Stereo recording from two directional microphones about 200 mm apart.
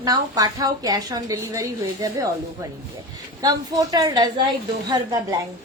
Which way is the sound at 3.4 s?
15° right (ahead or behind).